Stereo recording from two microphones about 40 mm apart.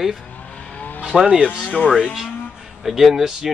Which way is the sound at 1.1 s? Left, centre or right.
Centre.